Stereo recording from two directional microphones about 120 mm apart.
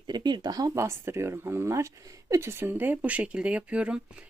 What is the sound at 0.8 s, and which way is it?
Speech, 20° right (ahead or behind).